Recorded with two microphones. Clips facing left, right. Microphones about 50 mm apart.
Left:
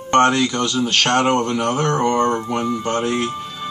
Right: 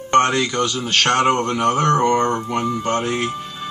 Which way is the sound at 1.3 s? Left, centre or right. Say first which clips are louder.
Right 1 dB; right.